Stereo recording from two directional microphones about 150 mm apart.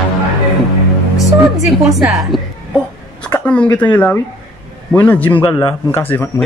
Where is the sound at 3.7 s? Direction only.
10° left (ahead or behind).